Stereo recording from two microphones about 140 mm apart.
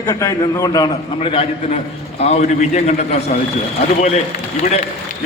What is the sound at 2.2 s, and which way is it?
A man's voice, 50° left (ahead or behind).